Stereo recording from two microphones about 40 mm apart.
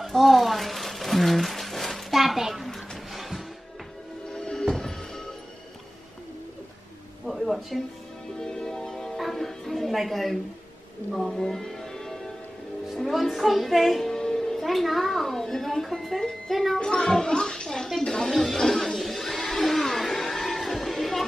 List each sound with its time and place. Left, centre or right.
0.0 s a sound: centre
2.1 s a sound: centre
3.1 s music: centre
4.3 s music: centre
7.2 s a sound: centre
8.4 s music: centre
9.9 s speech: centre
11.1 s music: centre
12.9 s music: centre
14.1 s music: centre
14.6 s speech: centre
16.8 s a sound: centre
20.5 s music: centre